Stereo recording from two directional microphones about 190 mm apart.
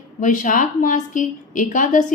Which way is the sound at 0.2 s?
40° left (ahead or behind).